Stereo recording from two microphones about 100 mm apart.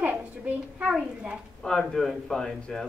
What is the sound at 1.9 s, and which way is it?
Speech, 5° left (ahead or behind).